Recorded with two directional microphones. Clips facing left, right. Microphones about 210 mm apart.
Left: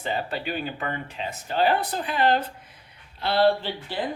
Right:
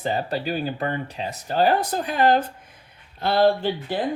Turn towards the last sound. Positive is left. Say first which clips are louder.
# right 3 dB
turn(degrees=-45)  # may be behind; listen again after turning